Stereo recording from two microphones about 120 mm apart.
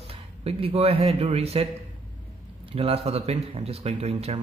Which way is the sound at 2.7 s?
55° right (ahead or behind).